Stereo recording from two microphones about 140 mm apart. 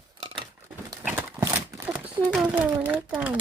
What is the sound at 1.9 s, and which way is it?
A child's voice, 10° right (ahead or behind).